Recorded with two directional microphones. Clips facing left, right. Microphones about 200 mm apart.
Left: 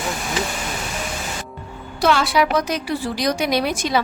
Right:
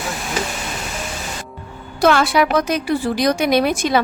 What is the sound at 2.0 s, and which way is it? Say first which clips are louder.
A woman's voice: right 3 dB; 50° right (ahead or behind).